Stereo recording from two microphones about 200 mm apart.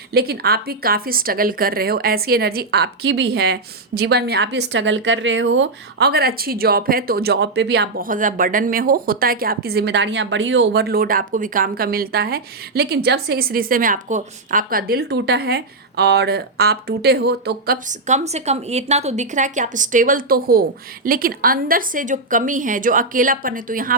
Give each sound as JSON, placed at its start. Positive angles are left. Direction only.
{"t": 0.1, "sound": "a woman's voice", "side_deg": -50}
{"t": 17.8, "sound": "a woman's voice", "side_deg": -35}